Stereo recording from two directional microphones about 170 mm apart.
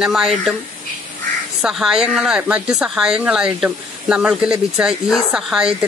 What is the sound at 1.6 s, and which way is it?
Speech, 5° right (ahead or behind).